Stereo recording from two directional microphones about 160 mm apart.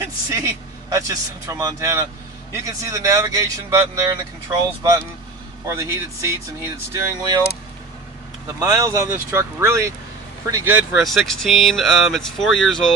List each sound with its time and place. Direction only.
0.0 s a man's voice: 20° right (ahead or behind)
8.5 s speech: 15° right (ahead or behind)
11.0 s speech: centre (ahead or behind)